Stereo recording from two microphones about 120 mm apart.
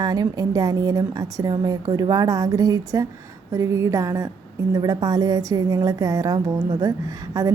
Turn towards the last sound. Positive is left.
turn(degrees=-30)  # may be behind; listen again after turning